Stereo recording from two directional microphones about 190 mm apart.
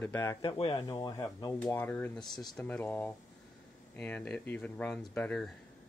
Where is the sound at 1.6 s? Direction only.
10° left (ahead or behind).